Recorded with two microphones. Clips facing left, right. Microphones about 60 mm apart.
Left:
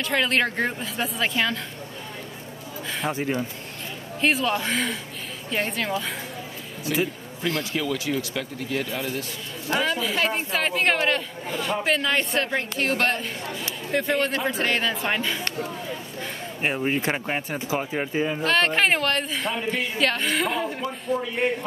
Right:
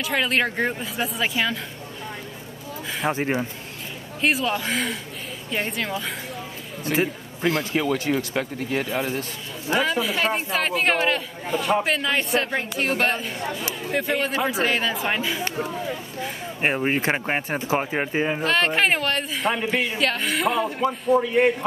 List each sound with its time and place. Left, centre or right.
0.0 s speech: centre
3.1 s speech: right
4.2 s speech: centre
7.7 s speech: right
9.8 s speech: centre
16.6 s speech: right
18.4 s speech: centre
19.5 s speech: right
20.0 s speech: centre